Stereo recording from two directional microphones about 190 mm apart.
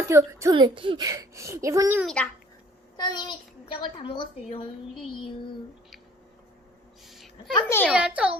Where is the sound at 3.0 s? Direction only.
25° left (ahead or behind).